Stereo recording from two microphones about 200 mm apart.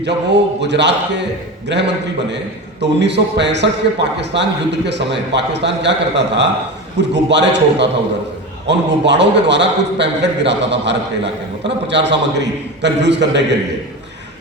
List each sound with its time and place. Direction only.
0.0 s a man's voice: 60° right (ahead or behind)